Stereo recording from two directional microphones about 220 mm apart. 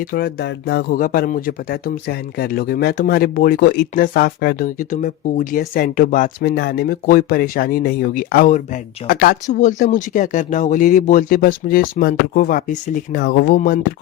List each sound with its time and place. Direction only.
0.1 s speech: 45° left (ahead or behind)